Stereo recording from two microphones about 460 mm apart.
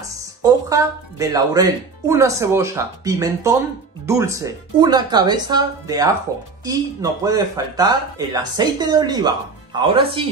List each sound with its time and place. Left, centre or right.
0.4 s speech: centre